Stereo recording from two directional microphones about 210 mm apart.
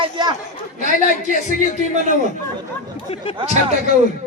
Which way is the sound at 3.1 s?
25° left (ahead or behind).